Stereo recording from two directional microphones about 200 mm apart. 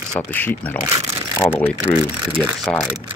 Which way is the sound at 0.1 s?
15° left (ahead or behind).